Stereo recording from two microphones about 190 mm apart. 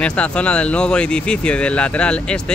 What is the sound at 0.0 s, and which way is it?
Speech, 5° left (ahead or behind).